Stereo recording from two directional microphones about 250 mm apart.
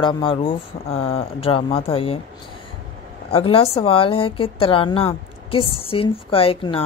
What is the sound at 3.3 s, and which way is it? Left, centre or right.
A woman's voice, left.